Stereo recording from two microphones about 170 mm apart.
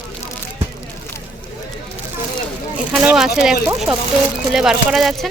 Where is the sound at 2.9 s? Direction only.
5° right (ahead or behind).